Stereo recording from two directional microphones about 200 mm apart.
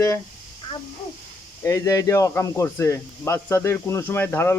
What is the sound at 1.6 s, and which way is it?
Speech, 15° left (ahead or behind).